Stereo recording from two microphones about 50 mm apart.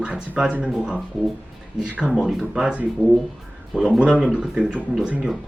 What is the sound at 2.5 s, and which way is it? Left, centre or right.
Speech, centre.